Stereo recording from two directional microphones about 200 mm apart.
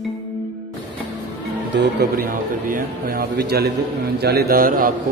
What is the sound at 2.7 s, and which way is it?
Speech, 45° right (ahead or behind).